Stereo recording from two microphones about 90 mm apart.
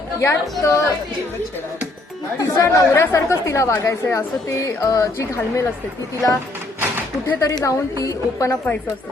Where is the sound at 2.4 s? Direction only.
40° left (ahead or behind).